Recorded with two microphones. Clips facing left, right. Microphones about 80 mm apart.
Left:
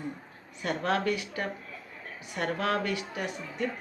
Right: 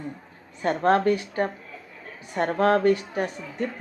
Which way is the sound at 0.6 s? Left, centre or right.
Right.